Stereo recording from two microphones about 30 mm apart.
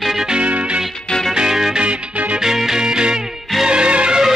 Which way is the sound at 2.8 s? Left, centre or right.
Right.